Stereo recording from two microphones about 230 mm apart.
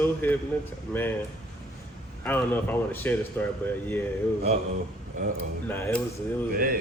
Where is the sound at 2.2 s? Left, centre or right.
Centre.